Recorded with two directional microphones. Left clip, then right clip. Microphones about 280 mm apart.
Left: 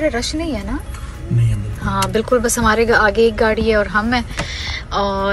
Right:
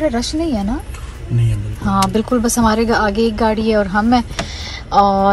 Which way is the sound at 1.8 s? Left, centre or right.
Centre.